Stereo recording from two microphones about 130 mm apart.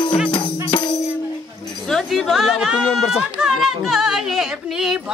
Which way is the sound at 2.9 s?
5° right (ahead or behind).